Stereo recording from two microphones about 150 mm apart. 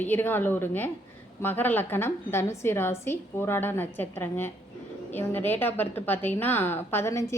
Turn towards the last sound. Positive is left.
turn(degrees=20)  # may be behind; listen again after turning